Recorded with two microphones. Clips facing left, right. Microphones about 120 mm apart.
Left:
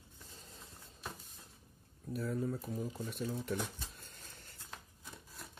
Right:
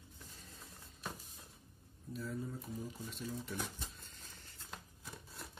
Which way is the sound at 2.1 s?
65° left (ahead or behind).